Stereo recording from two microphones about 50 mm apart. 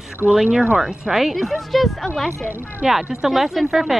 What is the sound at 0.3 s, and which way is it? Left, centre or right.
Speech, centre.